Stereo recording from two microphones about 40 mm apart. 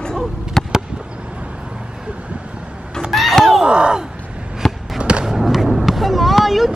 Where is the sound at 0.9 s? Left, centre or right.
Right.